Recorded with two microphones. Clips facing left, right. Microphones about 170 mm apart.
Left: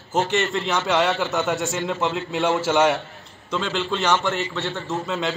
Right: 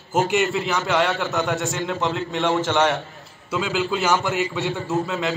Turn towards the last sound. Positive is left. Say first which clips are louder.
# even
turn(degrees=0)  # may be behind; listen again after turning